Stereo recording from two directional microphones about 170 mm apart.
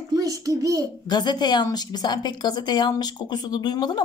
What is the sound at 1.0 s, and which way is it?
A woman's voice, 25° left (ahead or behind).